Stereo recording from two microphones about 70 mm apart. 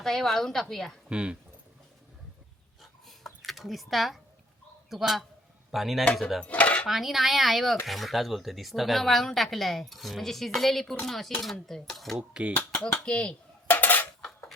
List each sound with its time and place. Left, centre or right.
0.0 s speech: centre
1.1 s speech: centre
3.4 s speech: centre
6.4 s dishes: centre
6.8 s speech: centre
12.3 s speech: centre
13.1 s speech: centre
13.7 s cutlery: left